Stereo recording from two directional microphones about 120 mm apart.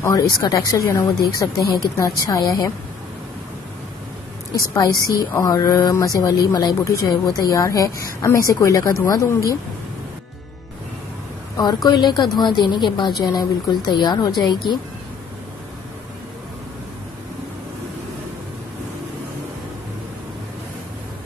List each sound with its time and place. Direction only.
0.0 s a woman's voice: 30° left (ahead or behind)
4.6 s a woman's voice: 30° left (ahead or behind)
11.5 s a woman's voice: 35° left (ahead or behind)